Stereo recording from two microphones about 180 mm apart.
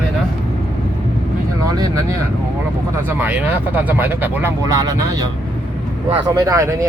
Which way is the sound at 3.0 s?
10° right (ahead or behind).